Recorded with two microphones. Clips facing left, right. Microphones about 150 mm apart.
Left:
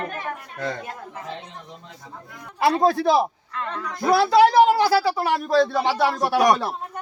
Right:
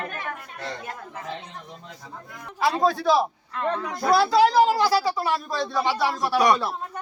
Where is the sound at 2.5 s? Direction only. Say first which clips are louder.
Left 3 dB; 60° left (ahead or behind).